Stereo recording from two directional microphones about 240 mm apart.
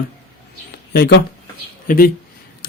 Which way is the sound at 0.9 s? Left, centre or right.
Left.